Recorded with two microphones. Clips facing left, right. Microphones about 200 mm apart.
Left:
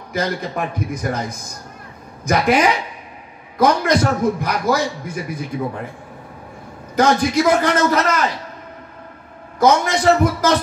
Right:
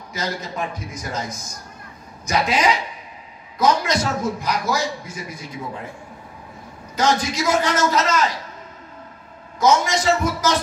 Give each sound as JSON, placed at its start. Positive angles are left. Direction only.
{"t": 0.1, "sound": "a man's voice", "side_deg": 55}
{"t": 7.0, "sound": "a man's voice", "side_deg": 60}
{"t": 9.6, "sound": "a man's voice", "side_deg": 60}